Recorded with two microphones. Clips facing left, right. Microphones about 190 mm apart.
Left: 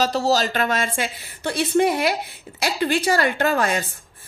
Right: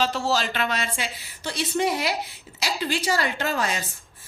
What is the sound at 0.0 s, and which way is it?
A woman's voice, 40° left (ahead or behind).